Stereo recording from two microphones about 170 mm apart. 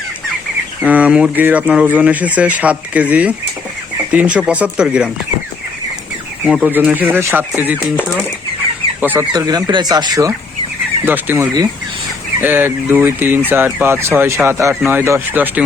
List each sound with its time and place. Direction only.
0.8 s speech: 10° right (ahead or behind)
6.4 s speech: 10° right (ahead or behind)
9.0 s chicken: 10° right (ahead or behind)
9.3 s speech: 20° right (ahead or behind)